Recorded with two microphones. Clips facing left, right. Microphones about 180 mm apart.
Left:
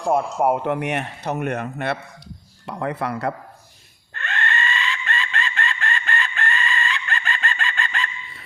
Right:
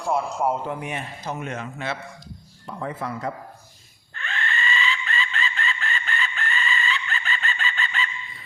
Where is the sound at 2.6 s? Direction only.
75° left (ahead or behind).